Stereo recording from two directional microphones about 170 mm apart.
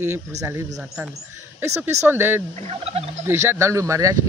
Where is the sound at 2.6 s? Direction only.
35° right (ahead or behind).